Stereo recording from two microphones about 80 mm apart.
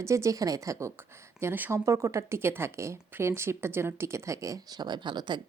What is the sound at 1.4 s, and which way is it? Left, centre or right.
A woman's voice, right.